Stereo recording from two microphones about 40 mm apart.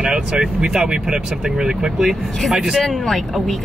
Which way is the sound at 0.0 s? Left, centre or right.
Right.